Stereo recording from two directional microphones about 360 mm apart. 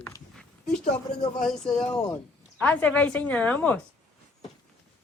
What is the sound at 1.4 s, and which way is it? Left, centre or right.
A woman's voice, centre.